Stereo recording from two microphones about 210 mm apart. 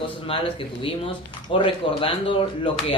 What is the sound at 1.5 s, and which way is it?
Speech, 25° left (ahead or behind).